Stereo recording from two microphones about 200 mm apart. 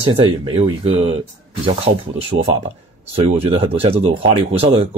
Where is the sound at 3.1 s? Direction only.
30° right (ahead or behind).